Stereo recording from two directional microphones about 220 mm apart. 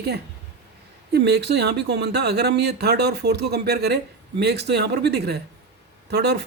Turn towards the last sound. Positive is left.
turn(degrees=-50)  # may be behind; listen again after turning